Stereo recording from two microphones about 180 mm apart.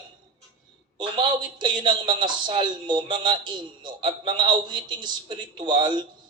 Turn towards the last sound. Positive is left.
turn(degrees=-25)  # may be behind; listen again after turning